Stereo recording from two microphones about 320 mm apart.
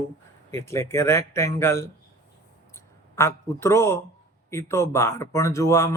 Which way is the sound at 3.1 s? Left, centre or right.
Centre.